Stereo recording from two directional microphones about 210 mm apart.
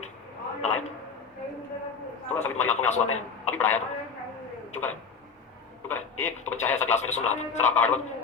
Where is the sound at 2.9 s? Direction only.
35° left (ahead or behind).